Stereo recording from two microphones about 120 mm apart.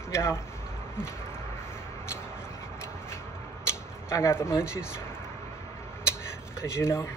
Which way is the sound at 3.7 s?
20° left (ahead or behind).